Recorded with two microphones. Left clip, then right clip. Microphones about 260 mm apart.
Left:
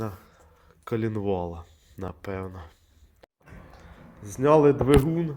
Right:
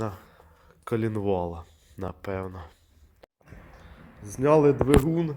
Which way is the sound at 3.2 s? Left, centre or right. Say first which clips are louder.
Left 1 dB; centre.